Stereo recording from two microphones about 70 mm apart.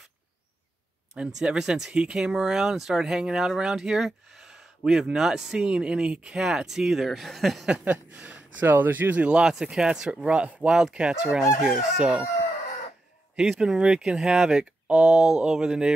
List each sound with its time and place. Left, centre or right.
1.1 s speech: centre
7.8 s speech: right
9.4 s speech: centre
13.4 s speech: centre